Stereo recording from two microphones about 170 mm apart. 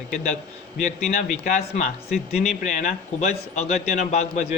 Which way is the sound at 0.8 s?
50° left (ahead or behind).